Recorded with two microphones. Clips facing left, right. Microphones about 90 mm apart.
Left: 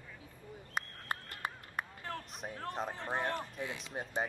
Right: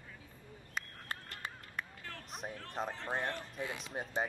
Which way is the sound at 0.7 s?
50° left (ahead or behind).